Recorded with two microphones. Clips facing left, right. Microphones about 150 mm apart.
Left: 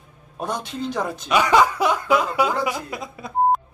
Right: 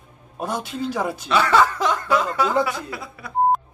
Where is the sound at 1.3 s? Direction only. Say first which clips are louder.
Left 1 dB; 15° left (ahead or behind).